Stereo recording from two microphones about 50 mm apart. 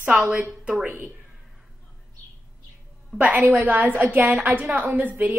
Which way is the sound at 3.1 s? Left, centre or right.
Right.